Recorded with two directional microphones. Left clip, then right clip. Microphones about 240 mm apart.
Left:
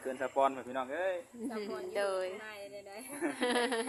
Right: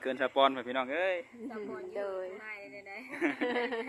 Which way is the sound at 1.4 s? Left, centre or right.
Centre.